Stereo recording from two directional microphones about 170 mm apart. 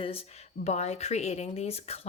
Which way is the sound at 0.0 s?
35° left (ahead or behind).